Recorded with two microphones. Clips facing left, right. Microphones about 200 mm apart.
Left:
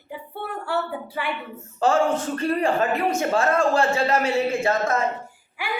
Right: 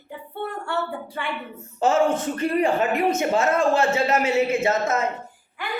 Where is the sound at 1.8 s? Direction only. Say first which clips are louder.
Even; 20° right (ahead or behind).